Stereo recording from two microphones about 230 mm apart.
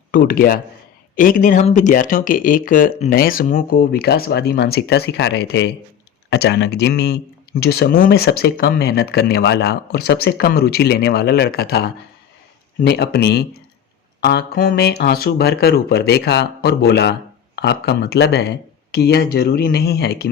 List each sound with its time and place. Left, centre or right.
0.1 s speech: left